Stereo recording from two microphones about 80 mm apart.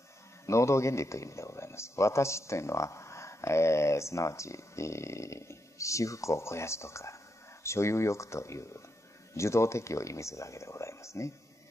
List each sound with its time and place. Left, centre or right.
0.5 s a man's voice: left